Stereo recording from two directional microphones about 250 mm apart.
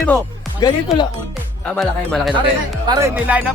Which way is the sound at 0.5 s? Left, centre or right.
Centre.